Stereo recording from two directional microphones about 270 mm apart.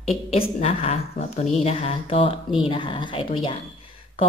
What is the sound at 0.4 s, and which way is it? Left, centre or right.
Speech, left.